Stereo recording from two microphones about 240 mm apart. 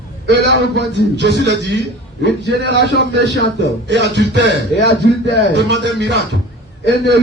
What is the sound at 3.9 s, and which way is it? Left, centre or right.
Music, right.